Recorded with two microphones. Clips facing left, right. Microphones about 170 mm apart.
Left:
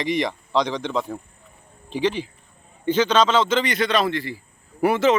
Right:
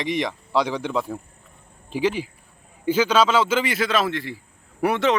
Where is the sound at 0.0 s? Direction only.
Centre (ahead or behind).